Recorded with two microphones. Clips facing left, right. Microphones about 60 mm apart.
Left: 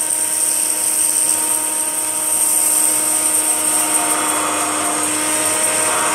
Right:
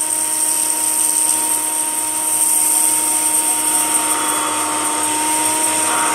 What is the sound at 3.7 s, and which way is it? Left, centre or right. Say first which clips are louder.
Vacuum cleaner: left 1 dB; centre.